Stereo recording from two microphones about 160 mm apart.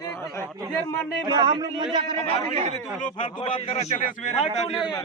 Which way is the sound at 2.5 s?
40° right (ahead or behind).